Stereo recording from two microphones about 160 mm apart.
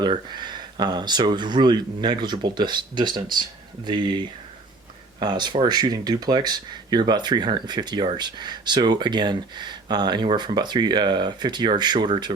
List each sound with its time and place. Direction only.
0.0 s speech: 25° right (ahead or behind)
5.2 s speech: 30° right (ahead or behind)